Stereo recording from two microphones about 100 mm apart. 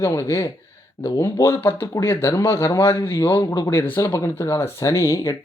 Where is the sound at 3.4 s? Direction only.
40° left (ahead or behind).